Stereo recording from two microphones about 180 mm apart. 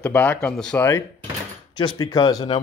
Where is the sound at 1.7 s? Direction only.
25° left (ahead or behind).